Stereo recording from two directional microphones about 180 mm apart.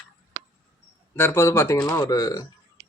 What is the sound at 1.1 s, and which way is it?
Speech, 15° left (ahead or behind).